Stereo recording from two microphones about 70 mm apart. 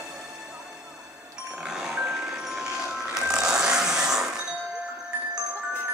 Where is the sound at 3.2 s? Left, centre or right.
Centre.